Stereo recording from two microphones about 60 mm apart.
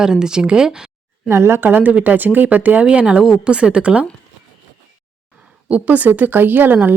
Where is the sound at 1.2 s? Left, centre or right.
Right.